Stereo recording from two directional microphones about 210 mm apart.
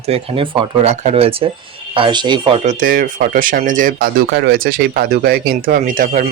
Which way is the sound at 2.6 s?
40° right (ahead or behind).